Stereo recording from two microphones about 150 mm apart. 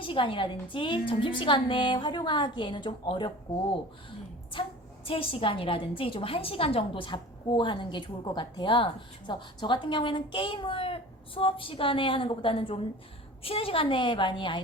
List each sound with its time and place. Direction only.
0.0 s a woman's voice: 35° left (ahead or behind)
5.0 s a woman's voice: 40° left (ahead or behind)